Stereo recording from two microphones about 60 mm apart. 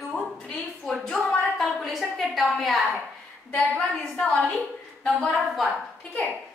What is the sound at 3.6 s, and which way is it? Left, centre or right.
Speech, centre.